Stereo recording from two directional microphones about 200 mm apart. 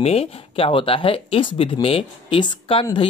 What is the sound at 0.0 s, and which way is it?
Speech, 30° left (ahead or behind).